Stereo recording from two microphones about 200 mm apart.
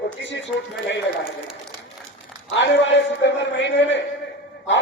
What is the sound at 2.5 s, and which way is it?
A man's voice, 65° left (ahead or behind).